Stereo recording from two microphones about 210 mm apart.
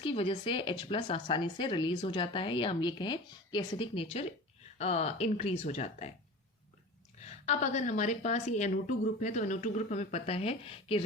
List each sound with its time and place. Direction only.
0.0 s a woman's voice: 25° left (ahead or behind)
7.3 s a woman's voice: 30° left (ahead or behind)